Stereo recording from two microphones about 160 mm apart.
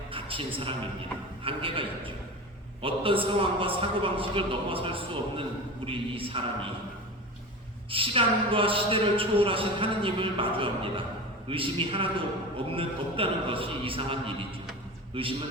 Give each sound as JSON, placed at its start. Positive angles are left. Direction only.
{"t": 0.1, "sound": "a sound", "side_deg": -35}
{"t": 1.5, "sound": "a man's voice", "side_deg": -35}
{"t": 7.9, "sound": "a man's voice", "side_deg": -35}